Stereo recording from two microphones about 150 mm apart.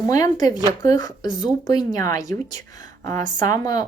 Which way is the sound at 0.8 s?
25° left (ahead or behind).